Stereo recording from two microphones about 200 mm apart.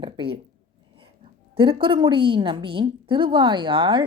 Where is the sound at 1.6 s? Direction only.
25° right (ahead or behind).